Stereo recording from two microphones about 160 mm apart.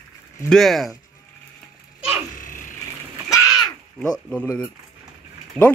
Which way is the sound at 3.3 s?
20° left (ahead or behind).